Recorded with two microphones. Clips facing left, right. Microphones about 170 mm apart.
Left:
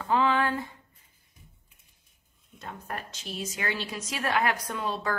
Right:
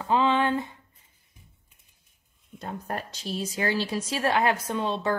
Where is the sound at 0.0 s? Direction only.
20° right (ahead or behind).